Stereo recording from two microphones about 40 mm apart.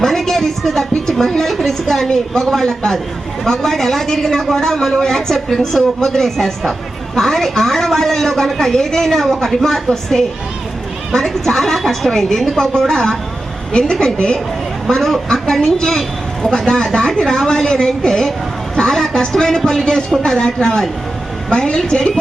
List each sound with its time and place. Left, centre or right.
0.0 s a woman's voice: centre
14.8 s a woman's voice: centre